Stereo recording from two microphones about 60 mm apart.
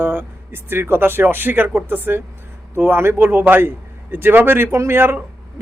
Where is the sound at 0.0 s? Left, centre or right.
Right.